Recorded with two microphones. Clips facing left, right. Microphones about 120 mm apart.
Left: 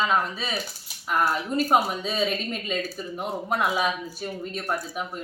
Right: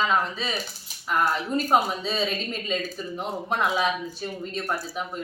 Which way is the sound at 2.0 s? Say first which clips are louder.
Left 1 dB; 5° left (ahead or behind).